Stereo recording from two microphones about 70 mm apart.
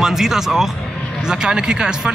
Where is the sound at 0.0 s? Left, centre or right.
Centre.